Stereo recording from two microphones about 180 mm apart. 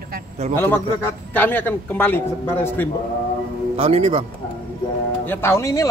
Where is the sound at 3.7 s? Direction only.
35° right (ahead or behind).